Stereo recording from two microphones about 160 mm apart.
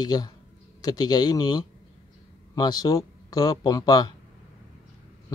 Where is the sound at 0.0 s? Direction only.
25° left (ahead or behind).